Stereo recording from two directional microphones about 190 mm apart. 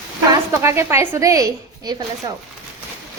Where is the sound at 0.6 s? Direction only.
15° right (ahead or behind).